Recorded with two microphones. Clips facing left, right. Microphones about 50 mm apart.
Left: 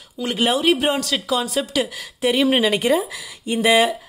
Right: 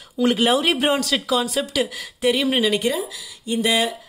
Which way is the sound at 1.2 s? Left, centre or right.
Centre.